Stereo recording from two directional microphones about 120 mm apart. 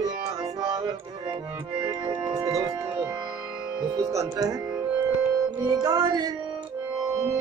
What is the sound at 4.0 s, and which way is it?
Music, 30° right (ahead or behind).